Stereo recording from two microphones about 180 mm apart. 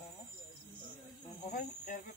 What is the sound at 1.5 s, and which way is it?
Insect, 45° left (ahead or behind).